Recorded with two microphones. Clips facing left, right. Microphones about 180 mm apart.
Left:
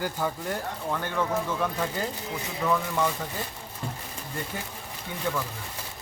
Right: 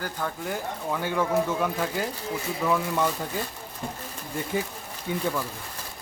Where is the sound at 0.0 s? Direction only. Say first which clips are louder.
Left 2 dB; 10° left (ahead or behind).